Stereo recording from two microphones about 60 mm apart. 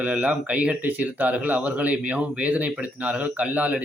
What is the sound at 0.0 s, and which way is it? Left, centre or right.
Speech, right.